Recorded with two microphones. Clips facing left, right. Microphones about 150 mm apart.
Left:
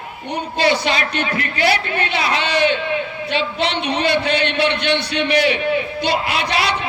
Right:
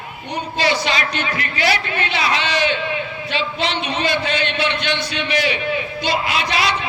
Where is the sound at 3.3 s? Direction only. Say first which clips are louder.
Left 2 dB; 60° left (ahead or behind).